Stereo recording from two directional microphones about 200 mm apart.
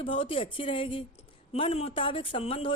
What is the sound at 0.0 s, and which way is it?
A woman's voice, 25° left (ahead or behind).